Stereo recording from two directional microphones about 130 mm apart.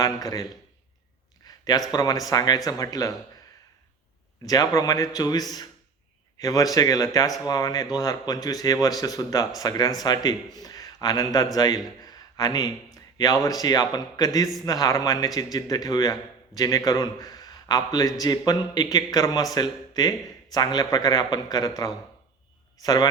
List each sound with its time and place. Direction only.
0.0 s a man's voice: 30° left (ahead or behind)
1.5 s a sound: 30° left (ahead or behind)
1.9 s a man's voice: 30° left (ahead or behind)
4.4 s a man's voice: 30° left (ahead or behind)
12.0 s a sound: 30° left (ahead or behind)
13.4 s a man's voice: 30° left (ahead or behind)
22.8 s a man's voice: 30° left (ahead or behind)